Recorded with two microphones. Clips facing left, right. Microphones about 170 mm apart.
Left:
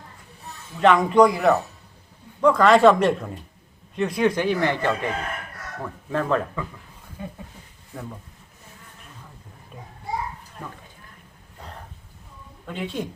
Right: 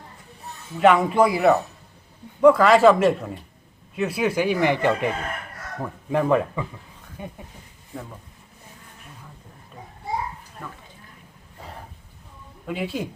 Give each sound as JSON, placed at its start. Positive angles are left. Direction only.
{"t": 0.8, "sound": "speech", "side_deg": -5}
{"t": 12.6, "sound": "speech", "side_deg": -5}